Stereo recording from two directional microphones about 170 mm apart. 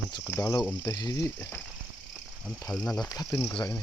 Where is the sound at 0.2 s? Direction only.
15° left (ahead or behind).